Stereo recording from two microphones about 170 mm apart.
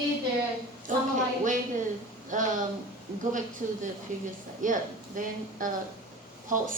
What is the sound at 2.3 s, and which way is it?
Speech, 50° right (ahead or behind).